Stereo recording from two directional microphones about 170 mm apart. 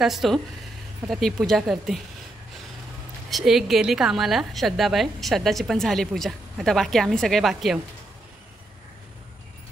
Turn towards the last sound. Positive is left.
turn(degrees=0)  # may be behind; listen again after turning